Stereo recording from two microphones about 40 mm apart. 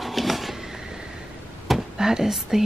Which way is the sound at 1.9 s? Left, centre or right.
Centre.